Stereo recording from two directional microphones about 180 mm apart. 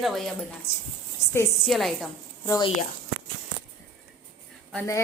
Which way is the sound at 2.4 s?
20° left (ahead or behind).